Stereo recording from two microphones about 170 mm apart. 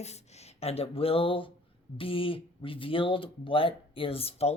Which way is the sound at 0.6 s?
35° left (ahead or behind).